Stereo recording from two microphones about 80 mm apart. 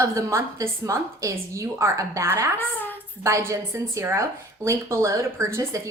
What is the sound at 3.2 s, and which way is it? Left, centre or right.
A woman's voice, right.